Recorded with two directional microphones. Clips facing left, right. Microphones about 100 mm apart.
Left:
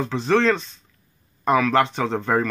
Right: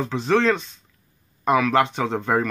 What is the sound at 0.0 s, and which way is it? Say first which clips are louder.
Speech: left 1 dB; 10° right (ahead or behind).